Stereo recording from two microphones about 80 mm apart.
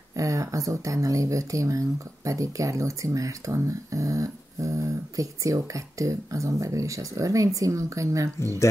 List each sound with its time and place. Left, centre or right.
0.1 s speech: right